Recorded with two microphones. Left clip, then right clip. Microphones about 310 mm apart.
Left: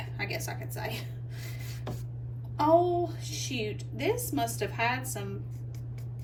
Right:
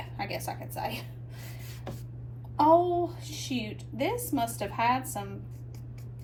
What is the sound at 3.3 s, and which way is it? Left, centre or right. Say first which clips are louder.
A woman's voice: left 1 dB; centre.